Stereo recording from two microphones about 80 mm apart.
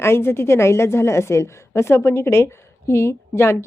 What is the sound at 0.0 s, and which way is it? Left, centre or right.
A woman's voice, left.